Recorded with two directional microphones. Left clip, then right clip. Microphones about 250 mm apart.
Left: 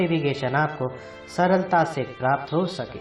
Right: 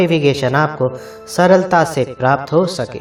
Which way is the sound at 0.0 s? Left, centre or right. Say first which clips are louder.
Right 10 dB; right.